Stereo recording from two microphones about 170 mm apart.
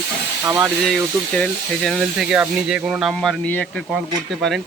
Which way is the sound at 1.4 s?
Centre (ahead or behind).